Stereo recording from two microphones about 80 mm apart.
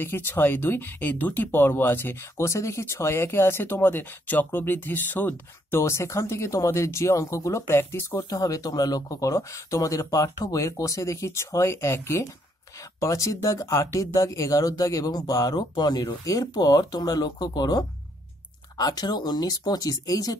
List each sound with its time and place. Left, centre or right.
0.0 s speech: left
5.8 s speech: left
8.3 s speech: left
16.1 s speech: left